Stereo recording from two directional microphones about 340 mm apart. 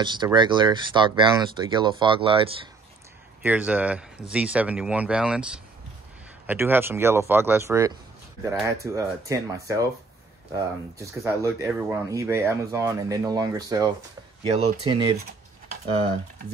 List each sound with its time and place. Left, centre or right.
0.0 s speech: centre
3.4 s speech: centre
11.0 s speech: centre